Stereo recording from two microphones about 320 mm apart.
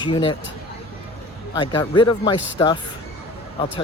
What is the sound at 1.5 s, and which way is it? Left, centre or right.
Speech, centre.